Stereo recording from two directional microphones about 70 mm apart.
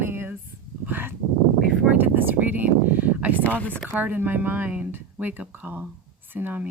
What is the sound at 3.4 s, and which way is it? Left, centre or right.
Speech, left.